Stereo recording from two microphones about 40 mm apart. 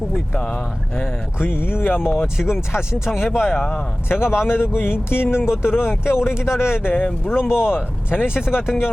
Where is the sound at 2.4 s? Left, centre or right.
Centre.